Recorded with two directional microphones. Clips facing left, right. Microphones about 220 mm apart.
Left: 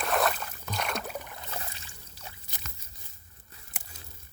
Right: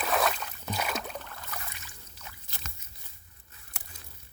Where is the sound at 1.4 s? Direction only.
30° left (ahead or behind).